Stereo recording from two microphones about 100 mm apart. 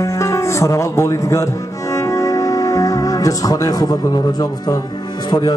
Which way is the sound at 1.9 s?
30° left (ahead or behind).